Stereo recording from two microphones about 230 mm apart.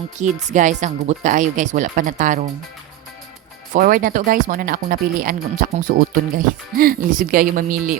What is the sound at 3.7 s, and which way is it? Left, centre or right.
Speech, right.